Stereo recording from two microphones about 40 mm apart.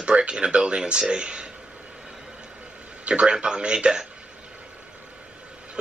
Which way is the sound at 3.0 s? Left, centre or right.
Right.